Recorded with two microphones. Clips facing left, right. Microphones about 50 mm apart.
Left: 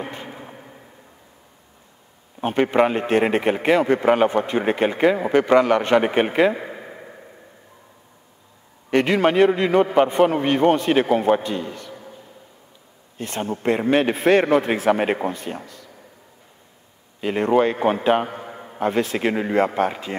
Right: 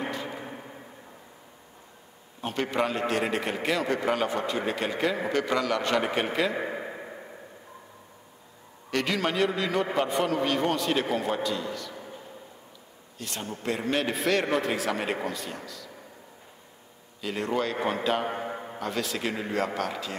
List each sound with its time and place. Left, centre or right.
2.4 s a man's voice: left
6.5 s speech: centre
8.9 s a man's voice: left
13.2 s a man's voice: left
17.2 s a man's voice: left
18.3 s a sound: centre
18.8 s a man's voice: left